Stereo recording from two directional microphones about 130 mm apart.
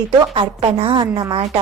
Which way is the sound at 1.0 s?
30° right (ahead or behind).